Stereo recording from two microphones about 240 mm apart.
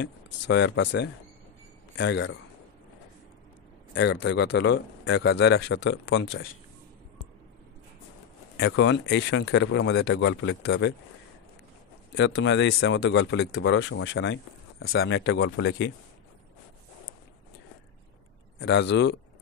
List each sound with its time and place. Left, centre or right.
0.0 s speech: left
3.9 s speech: left
8.5 s speech: left
12.1 s speech: left
18.6 s speech: left